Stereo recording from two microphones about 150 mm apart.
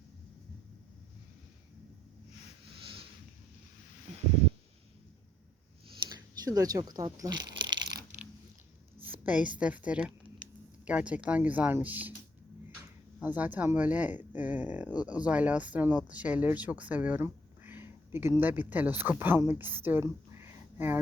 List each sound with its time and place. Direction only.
6.0 s shuffling cards: 25° right (ahead or behind)
9.0 s a woman's voice: 10° right (ahead or behind)
13.1 s speech: 10° right (ahead or behind)